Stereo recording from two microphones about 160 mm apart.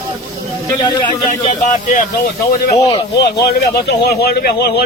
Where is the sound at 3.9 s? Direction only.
80° left.